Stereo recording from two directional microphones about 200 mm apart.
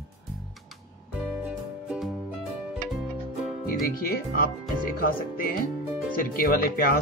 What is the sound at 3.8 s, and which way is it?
Speech, 45° left (ahead or behind).